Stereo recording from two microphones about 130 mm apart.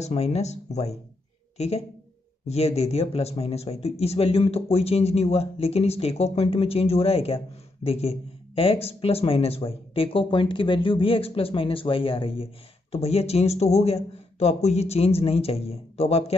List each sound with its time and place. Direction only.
0.0 s speech: 55° left (ahead or behind)
2.4 s speech: 55° left (ahead or behind)